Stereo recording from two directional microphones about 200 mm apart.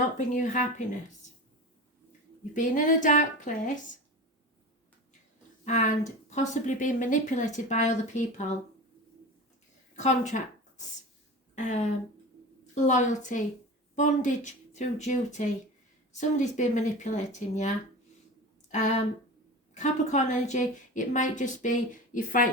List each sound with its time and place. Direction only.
0.0 s speech: 40° left (ahead or behind)
2.5 s speech: 40° left (ahead or behind)
5.6 s speech: 35° left (ahead or behind)
9.9 s a sound: 35° left (ahead or behind)
11.5 s speech: 35° left (ahead or behind)